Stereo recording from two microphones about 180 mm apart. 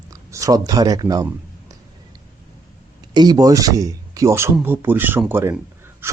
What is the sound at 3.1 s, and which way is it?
Speech, 20° right (ahead or behind).